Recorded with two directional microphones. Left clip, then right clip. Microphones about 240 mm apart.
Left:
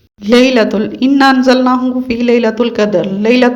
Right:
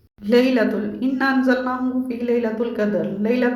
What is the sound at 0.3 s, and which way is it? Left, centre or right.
A woman's voice, left.